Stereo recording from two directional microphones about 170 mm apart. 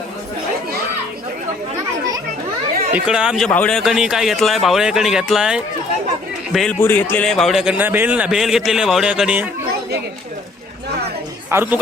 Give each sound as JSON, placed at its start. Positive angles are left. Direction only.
{"t": 3.1, "sound": "a man's voice", "side_deg": -5}
{"t": 11.5, "sound": "speech", "side_deg": -10}